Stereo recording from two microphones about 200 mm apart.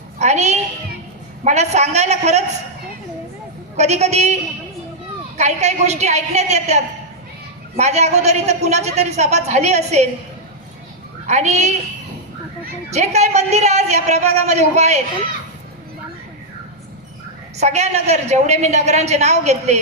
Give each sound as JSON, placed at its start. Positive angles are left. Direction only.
{"t": 0.2, "sound": "music", "side_deg": -35}
{"t": 1.5, "sound": "a woman's voice", "side_deg": -35}
{"t": 3.8, "sound": "a woman's voice", "side_deg": -35}
{"t": 5.4, "sound": "a woman's voice", "side_deg": -35}
{"t": 11.3, "sound": "a woman's voice", "side_deg": -35}
{"t": 12.9, "sound": "a woman's voice", "side_deg": -35}
{"t": 17.6, "sound": "a woman's voice", "side_deg": -35}